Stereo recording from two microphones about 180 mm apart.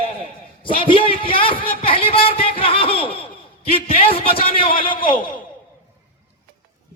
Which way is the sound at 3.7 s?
30° left (ahead or behind).